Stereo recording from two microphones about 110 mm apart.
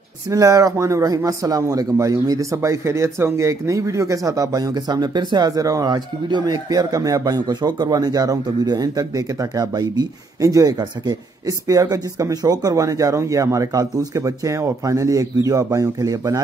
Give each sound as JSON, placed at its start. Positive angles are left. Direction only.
{"t": 0.3, "sound": "speech", "side_deg": -30}